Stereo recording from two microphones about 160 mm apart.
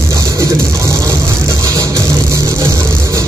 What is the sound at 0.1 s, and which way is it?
Music, 20° right (ahead or behind).